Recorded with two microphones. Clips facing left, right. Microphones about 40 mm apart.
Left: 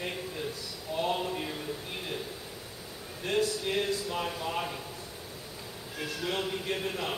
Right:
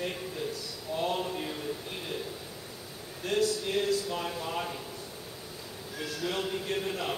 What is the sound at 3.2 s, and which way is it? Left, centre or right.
Speech, left.